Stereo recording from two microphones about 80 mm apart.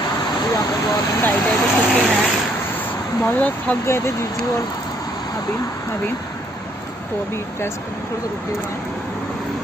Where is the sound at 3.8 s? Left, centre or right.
Left.